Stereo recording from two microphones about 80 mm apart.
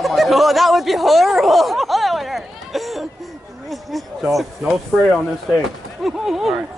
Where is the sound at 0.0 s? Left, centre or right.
Centre.